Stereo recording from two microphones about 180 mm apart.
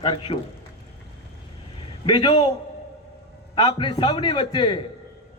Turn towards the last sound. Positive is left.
turn(degrees=25)  # may be behind; listen again after turning